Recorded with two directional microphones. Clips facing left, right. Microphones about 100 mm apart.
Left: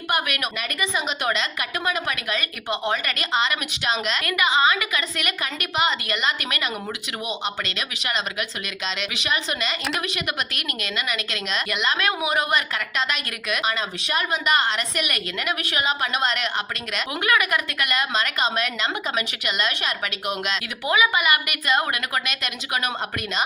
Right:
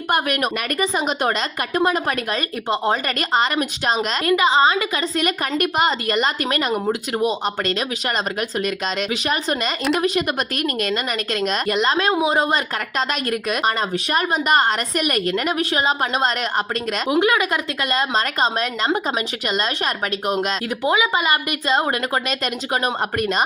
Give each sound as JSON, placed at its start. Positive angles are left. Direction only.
{"t": 0.8, "sound": "speech", "side_deg": -40}
{"t": 17.1, "sound": "speech", "side_deg": -25}
{"t": 20.9, "sound": "speech", "side_deg": -25}